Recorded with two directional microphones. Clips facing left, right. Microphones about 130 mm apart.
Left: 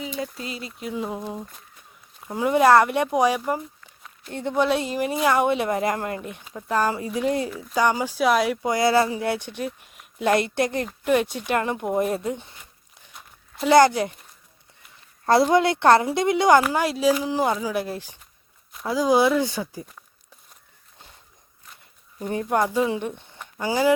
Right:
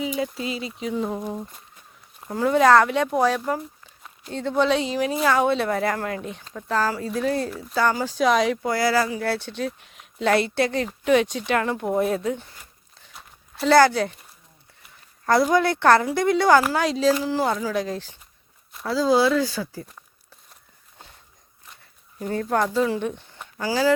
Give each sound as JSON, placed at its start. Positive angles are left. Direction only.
{"t": 0.0, "sound": "speech", "side_deg": -5}
{"t": 2.3, "sound": "speech", "side_deg": 10}
{"t": 7.5, "sound": "speech", "side_deg": 0}
{"t": 7.8, "sound": "speech", "side_deg": 15}
{"t": 8.6, "sound": "speech", "side_deg": 20}
{"t": 13.7, "sound": "speech", "side_deg": 15}
{"t": 15.3, "sound": "a woman's voice", "side_deg": 20}
{"t": 22.3, "sound": "speech", "side_deg": 15}